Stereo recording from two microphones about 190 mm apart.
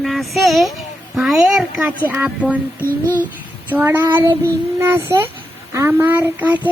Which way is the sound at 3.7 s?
10° right (ahead or behind).